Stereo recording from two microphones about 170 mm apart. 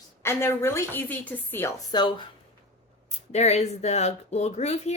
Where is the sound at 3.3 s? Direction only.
40° left (ahead or behind).